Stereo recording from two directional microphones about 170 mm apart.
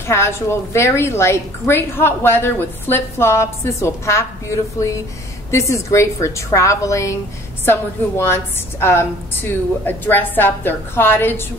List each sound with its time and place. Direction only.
0.0 s a woman's voice: 15° left (ahead or behind)